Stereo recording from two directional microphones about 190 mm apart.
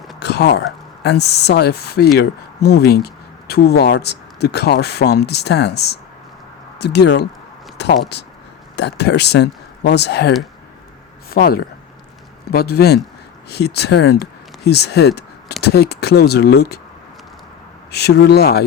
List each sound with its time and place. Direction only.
0.2 s speech: 60° left (ahead or behind)
17.9 s speech: 60° left (ahead or behind)